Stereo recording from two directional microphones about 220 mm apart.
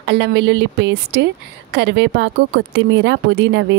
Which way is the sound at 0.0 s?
50° right (ahead or behind).